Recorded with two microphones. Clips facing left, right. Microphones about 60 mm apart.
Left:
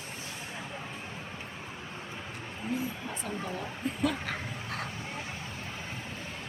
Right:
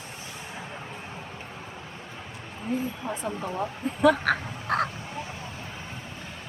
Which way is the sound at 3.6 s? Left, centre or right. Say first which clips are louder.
Right 11 dB; right.